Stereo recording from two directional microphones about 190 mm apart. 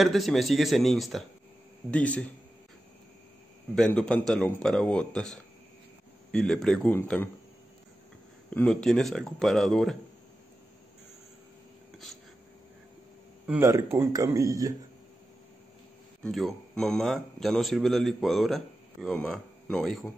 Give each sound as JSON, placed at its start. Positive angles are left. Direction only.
{"t": 0.0, "sound": "speech", "side_deg": 0}
{"t": 3.7, "sound": "speech", "side_deg": 5}
{"t": 8.5, "sound": "speech", "side_deg": 5}
{"t": 13.5, "sound": "speech", "side_deg": -15}
{"t": 16.2, "sound": "speech", "side_deg": 0}